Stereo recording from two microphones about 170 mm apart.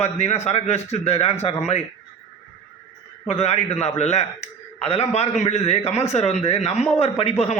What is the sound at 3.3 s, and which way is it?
A man's voice, 40° left (ahead or behind).